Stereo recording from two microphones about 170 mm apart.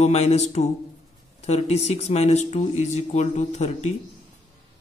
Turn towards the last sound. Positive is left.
turn(degrees=40)  # may be behind; listen again after turning